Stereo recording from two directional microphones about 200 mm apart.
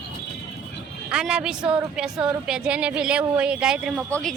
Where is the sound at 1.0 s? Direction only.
5° right (ahead or behind).